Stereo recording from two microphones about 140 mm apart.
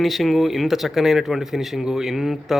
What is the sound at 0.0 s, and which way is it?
Speech, centre (ahead or behind).